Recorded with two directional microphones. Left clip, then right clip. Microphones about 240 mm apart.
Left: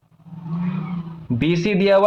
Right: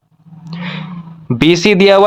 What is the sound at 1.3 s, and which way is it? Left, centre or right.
Speech, right.